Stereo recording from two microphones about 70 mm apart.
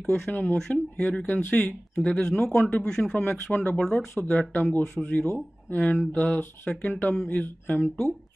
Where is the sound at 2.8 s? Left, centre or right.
Centre.